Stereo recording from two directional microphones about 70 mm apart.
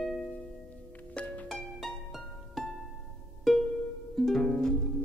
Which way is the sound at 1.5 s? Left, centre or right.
Centre.